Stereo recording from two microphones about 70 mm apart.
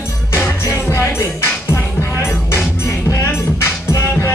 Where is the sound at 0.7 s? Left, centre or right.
Left.